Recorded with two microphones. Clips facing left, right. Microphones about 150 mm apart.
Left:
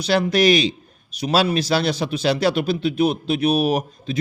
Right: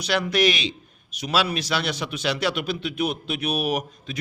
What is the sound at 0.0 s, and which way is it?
Speech, 30° left (ahead or behind).